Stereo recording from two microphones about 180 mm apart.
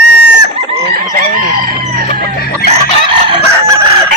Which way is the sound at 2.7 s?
30° right (ahead or behind).